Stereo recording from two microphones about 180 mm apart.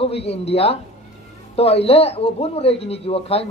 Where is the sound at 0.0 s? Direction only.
35° left (ahead or behind).